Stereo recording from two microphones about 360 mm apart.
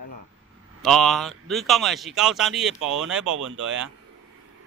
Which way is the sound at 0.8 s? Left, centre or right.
Centre.